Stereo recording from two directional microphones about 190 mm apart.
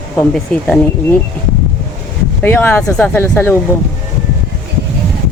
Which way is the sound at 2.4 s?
10° left (ahead or behind).